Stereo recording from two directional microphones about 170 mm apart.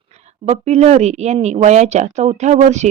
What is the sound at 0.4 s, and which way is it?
Speech, 40° right (ahead or behind).